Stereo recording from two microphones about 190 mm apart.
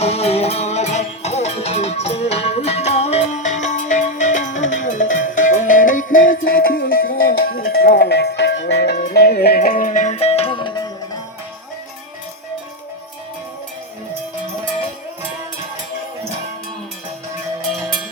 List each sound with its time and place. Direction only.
0.0 s music: 35° left (ahead or behind)